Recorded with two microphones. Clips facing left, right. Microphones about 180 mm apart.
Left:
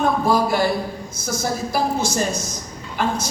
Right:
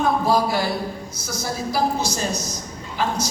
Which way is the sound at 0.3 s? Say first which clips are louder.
Left 2 dB; 50° left (ahead or behind).